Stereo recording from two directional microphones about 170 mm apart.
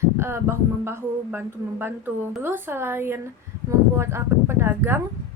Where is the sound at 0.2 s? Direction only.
15° right (ahead or behind).